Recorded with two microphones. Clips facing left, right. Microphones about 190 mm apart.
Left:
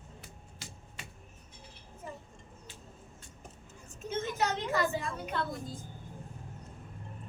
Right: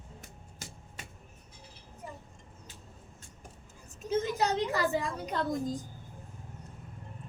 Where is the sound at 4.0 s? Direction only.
35° right (ahead or behind).